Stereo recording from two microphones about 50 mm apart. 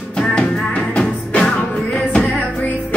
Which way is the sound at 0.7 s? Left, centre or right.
Left.